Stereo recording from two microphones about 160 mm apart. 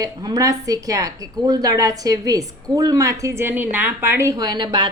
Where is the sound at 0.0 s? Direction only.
25° right (ahead or behind).